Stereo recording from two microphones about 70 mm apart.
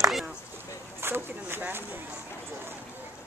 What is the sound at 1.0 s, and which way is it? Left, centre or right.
Speech, right.